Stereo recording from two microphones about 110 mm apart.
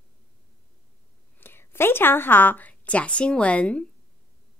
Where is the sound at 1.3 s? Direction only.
20° left (ahead or behind).